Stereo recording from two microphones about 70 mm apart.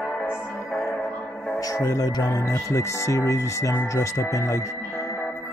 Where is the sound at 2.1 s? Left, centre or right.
Left.